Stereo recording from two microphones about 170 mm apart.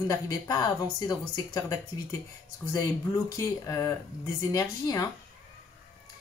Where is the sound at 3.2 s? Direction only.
20° left (ahead or behind).